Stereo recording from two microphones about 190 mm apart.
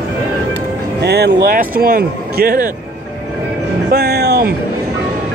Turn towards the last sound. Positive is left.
turn(degrees=-55)  # may be behind; listen again after turning